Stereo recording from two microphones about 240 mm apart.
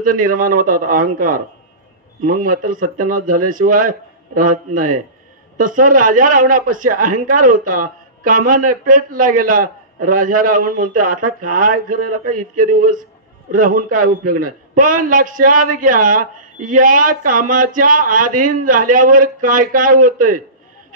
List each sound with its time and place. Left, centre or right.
0.0 s speech: right
4.7 s a man's voice: right
5.6 s speech: right